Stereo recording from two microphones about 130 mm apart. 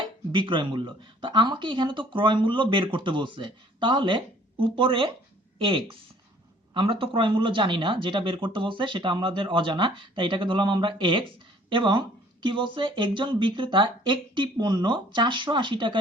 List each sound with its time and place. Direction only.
0.0 s speech: 40° right (ahead or behind)